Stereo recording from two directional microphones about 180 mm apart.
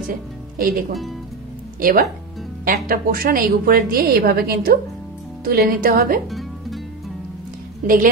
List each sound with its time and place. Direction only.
0.0 s a woman's voice: 50° right (ahead or behind)
7.8 s a woman's voice: 50° right (ahead or behind)